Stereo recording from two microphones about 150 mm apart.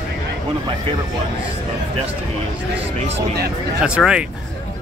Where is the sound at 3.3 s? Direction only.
90° right.